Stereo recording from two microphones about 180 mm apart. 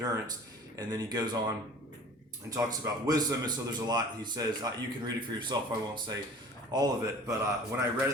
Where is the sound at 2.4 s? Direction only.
20° right (ahead or behind).